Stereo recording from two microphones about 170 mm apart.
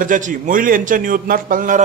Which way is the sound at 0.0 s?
50° right (ahead or behind).